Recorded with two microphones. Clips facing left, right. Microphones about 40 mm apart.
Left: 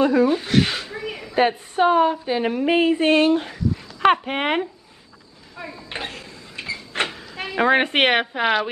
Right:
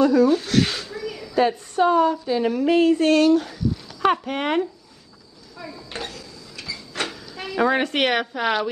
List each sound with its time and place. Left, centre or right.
0.0 s a woman's voice: left
4.2 s speech: left
5.6 s a sound: left